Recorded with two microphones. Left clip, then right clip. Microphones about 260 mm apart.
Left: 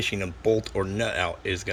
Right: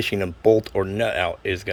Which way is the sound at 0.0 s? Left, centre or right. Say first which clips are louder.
Right 6 dB; centre.